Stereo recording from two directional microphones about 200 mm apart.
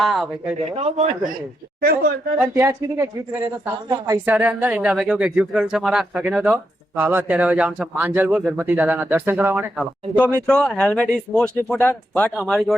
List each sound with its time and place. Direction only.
0.0 s speech: centre (ahead or behind)
0.6 s speech: 30° right (ahead or behind)
1.8 s a woman's voice: 50° right (ahead or behind)
2.4 s speech: 10° right (ahead or behind)
10.4 s speech: 5° left (ahead or behind)